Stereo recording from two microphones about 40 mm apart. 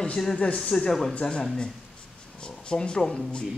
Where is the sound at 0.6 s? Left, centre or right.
Centre.